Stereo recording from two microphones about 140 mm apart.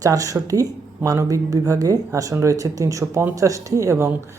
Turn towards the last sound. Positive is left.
turn(degrees=-20)  # may be behind; listen again after turning